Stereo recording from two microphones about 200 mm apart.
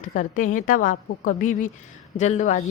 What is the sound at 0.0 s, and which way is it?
A woman's voice, 40° left (ahead or behind).